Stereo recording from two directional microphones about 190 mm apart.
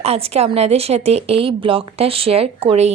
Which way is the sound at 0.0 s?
35° right (ahead or behind).